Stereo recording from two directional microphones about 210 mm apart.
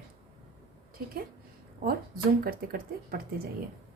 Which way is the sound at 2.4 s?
45° right (ahead or behind).